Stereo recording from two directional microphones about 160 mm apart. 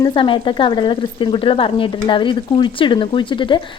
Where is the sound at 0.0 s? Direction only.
30° left (ahead or behind).